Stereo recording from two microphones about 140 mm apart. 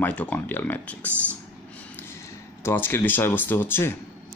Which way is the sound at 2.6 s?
15° left (ahead or behind).